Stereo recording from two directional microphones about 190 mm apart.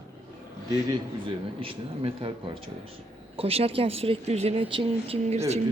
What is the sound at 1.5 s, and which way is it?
Speech, 30° right (ahead or behind).